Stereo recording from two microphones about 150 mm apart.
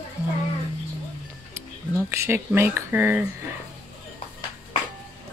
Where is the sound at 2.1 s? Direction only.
15° right (ahead or behind).